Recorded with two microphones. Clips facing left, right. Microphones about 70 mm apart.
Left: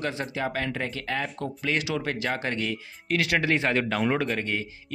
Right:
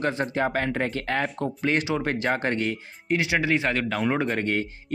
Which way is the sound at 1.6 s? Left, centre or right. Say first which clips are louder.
Right 3 dB; right.